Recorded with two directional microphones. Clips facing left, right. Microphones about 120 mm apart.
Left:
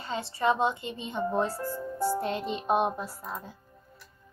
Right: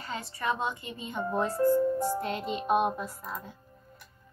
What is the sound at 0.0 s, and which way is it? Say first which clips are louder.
A child's voice: left 6 dB; 25° left (ahead or behind).